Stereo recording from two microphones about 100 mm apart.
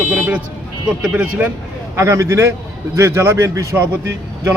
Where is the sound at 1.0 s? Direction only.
15° right (ahead or behind).